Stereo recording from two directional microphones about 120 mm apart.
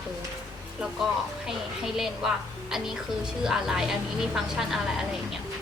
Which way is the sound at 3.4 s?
5° right (ahead or behind).